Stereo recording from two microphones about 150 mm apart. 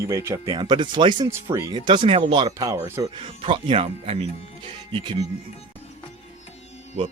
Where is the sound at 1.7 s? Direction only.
30° right (ahead or behind).